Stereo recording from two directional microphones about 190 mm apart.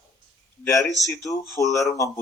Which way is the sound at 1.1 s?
15° left (ahead or behind).